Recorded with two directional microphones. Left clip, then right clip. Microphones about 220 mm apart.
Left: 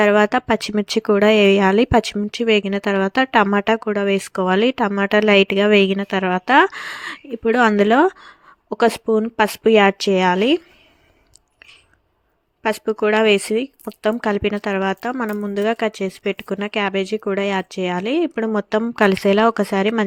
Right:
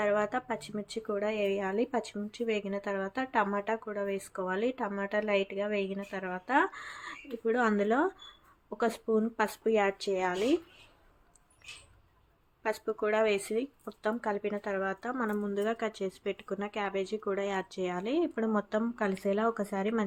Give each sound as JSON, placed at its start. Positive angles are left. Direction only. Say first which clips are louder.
{"t": 0.0, "sound": "speech", "louder": "left 15 dB", "side_deg": 40}
{"t": 12.6, "sound": "speech", "louder": "left 13 dB", "side_deg": 40}